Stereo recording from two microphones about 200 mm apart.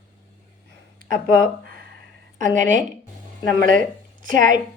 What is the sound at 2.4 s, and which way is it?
A woman's voice, 40° right (ahead or behind).